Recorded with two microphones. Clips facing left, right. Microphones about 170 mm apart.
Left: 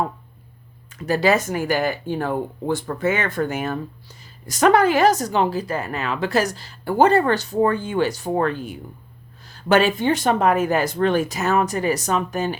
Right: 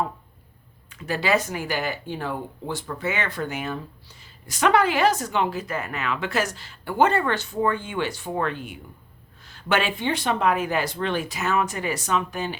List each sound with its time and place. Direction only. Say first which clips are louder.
0.9 s speech: left 5 dB; 40° left (ahead or behind)